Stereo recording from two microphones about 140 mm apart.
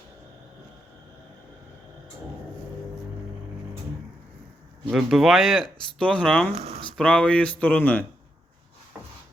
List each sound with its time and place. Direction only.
4.9 s speech: centre (ahead or behind)
6.5 s speech: 50° right (ahead or behind)
6.9 s speech: 5° left (ahead or behind)